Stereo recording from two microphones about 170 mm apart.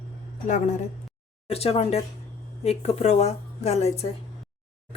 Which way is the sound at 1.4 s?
35° left (ahead or behind).